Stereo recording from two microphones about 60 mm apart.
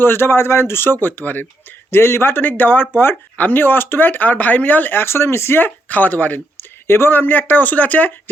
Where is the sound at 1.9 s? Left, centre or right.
Left.